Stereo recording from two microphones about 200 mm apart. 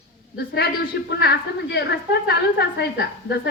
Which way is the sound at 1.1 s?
55° left (ahead or behind).